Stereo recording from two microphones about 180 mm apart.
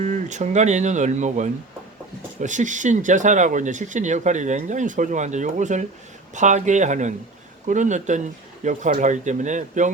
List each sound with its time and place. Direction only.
0.0 s speech: 40° right (ahead or behind)